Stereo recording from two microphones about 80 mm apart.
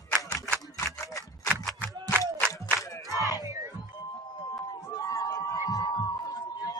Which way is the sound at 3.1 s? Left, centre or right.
Left.